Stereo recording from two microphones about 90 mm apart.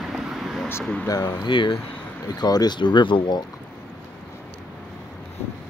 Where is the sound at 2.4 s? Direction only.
50° left (ahead or behind).